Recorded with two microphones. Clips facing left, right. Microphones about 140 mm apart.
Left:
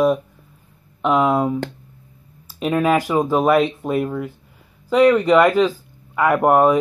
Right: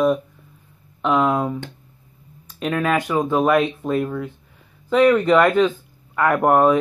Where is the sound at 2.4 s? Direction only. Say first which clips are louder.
Left 2 dB; 5° left (ahead or behind).